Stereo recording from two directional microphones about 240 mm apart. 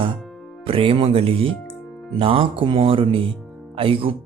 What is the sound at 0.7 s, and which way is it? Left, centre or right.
Speech, right.